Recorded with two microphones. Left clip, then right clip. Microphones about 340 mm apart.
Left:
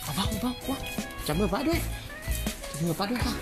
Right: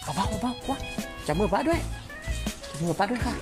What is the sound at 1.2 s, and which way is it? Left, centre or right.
Speech, centre.